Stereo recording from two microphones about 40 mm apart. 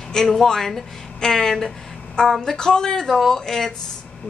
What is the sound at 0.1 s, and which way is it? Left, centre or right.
A woman's voice, centre.